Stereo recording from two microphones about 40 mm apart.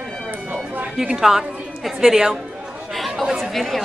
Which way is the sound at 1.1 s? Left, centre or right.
Centre.